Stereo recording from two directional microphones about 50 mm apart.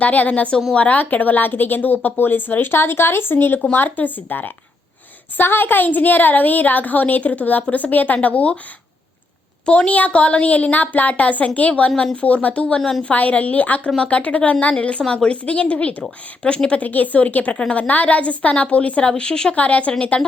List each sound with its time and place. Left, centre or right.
0.0 s a woman's voice: left
9.6 s a woman's voice: left
13.0 s a woman's voice: left
16.8 s a woman's voice: left
19.5 s a woman's voice: left